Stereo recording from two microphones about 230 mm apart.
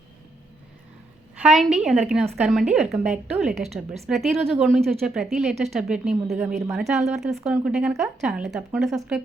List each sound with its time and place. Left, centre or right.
1.4 s speech: centre
3.5 s a woman's voice: right
3.8 s speech: centre